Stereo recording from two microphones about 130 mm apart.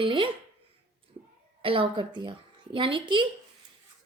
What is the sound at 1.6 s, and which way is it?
A woman's voice, 45° right (ahead or behind).